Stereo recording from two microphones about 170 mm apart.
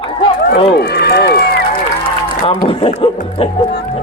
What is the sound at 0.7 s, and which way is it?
Sheep, 70° left (ahead or behind).